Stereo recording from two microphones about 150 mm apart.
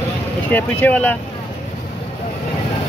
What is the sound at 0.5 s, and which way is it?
Speech, 10° left (ahead or behind).